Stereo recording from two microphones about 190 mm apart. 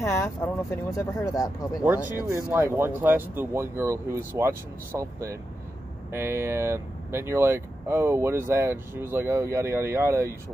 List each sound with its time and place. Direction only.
0.0 s speech: 15° left (ahead or behind)
2.2 s speech: 10° right (ahead or behind)